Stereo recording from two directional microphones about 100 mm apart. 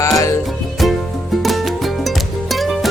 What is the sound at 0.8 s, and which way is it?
Music, centre (ahead or behind).